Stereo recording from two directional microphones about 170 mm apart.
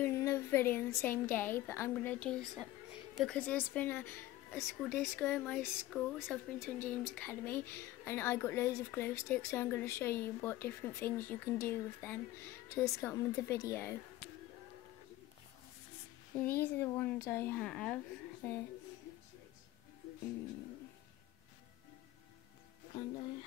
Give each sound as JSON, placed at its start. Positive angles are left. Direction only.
{"t": 0.0, "sound": "a woman's voice", "side_deg": 15}
{"t": 16.5, "sound": "speech", "side_deg": 10}